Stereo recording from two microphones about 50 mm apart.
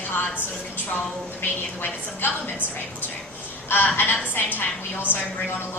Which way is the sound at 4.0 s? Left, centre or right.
Left.